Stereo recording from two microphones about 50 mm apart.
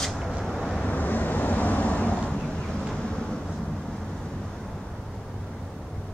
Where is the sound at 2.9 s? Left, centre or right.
Centre.